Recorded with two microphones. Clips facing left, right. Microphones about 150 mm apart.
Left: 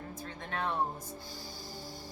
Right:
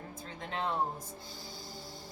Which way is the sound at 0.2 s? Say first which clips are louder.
Right 1 dB; 25° right (ahead or behind).